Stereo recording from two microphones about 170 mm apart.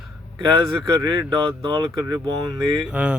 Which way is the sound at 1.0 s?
20° right (ahead or behind).